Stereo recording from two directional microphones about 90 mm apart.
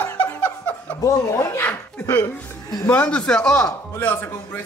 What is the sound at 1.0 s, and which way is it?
Speech, 35° left (ahead or behind).